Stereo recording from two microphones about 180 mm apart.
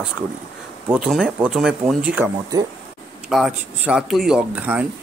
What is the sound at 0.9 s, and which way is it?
Speech, 5° right (ahead or behind).